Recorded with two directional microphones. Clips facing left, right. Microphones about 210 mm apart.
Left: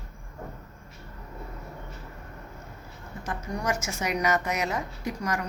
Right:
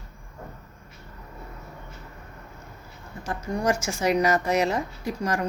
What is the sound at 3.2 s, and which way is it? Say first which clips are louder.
Speech: right 5 dB; 30° right (ahead or behind).